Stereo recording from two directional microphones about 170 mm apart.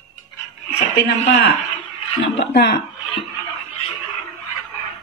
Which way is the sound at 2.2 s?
85° left.